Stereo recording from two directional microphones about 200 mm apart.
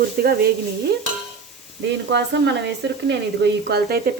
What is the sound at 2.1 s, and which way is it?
Speech, 60° right (ahead or behind).